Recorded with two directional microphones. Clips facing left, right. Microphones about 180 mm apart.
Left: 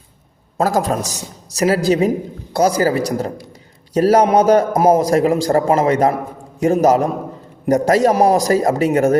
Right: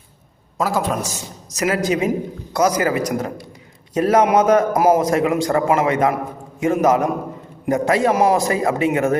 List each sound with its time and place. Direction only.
0.6 s a man's voice: 40° left (ahead or behind)